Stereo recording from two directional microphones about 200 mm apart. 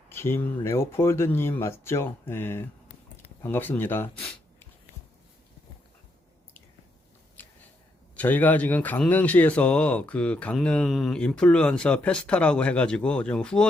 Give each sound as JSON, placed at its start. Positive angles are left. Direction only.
{"t": 0.1, "sound": "speech", "side_deg": 10}
{"t": 7.4, "sound": "a sound", "side_deg": 10}
{"t": 8.1, "sound": "speech", "side_deg": 10}